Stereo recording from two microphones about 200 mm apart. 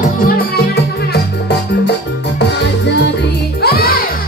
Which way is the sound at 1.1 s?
55° left (ahead or behind).